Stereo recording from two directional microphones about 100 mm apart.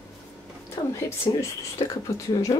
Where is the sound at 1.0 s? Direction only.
30° left (ahead or behind).